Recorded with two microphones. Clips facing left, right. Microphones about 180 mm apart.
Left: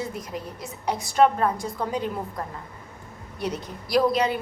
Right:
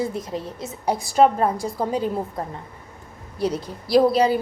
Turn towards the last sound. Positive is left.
turn(degrees=-35)  # may be behind; listen again after turning